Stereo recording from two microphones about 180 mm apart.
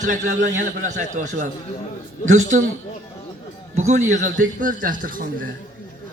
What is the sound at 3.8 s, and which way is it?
A man's voice, 40° right (ahead or behind).